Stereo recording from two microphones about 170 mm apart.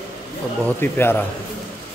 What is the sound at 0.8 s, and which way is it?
Speech, 15° left (ahead or behind).